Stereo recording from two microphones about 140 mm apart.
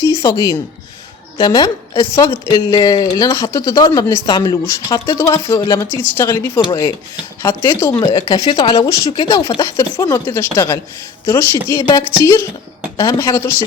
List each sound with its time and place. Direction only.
0.0 s a sound: 20° left (ahead or behind)
1.4 s a woman's voice: 30° left (ahead or behind)
6.6 s speech: 30° left (ahead or behind)
7.8 s a woman's voice: 20° left (ahead or behind)
8.2 s a woman's voice: 35° left (ahead or behind); by 13.7 s 15° left (ahead or behind)